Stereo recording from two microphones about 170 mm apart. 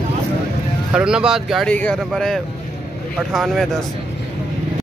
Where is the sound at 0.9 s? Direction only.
5° right (ahead or behind).